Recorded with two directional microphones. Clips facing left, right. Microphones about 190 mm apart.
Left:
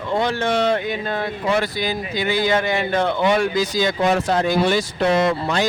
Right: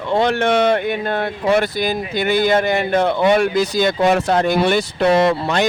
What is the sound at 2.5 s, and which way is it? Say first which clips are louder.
Speech: right 3 dB; 45° right (ahead or behind).